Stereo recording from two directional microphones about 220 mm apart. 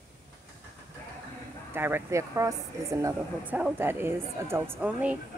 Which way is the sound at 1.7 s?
10° right (ahead or behind).